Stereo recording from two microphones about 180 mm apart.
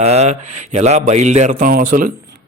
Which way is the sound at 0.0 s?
35° right (ahead or behind).